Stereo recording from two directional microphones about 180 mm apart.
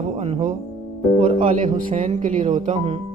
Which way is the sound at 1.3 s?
50° right (ahead or behind).